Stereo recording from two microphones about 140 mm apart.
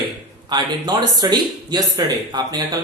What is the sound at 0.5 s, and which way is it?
Speech, 30° right (ahead or behind).